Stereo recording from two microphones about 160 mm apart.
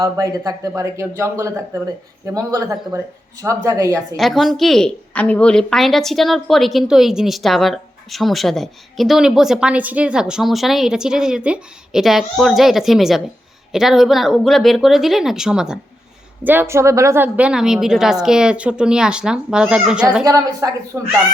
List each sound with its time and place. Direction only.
0.0 s speech: 20° right (ahead or behind)
4.2 s a woman's voice: centre (ahead or behind)
20.2 s speech: 20° right (ahead or behind)